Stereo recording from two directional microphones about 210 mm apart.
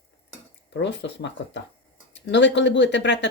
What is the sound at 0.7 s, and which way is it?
Speech, 55° left (ahead or behind).